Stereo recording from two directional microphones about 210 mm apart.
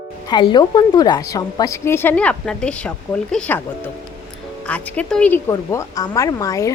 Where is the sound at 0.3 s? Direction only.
20° left (ahead or behind).